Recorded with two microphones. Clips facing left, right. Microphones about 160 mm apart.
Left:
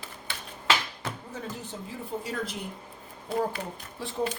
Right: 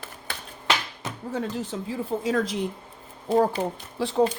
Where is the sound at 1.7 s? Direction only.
90° right.